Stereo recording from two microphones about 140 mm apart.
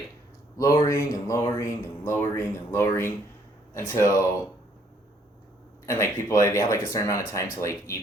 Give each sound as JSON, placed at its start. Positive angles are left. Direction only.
{"t": 0.5, "sound": "speech", "side_deg": 20}
{"t": 5.8, "sound": "speech", "side_deg": 20}